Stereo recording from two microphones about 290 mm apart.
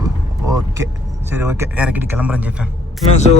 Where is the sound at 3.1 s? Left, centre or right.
Left.